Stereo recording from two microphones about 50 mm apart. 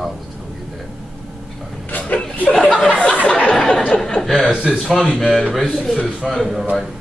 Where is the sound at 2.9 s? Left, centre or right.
Left.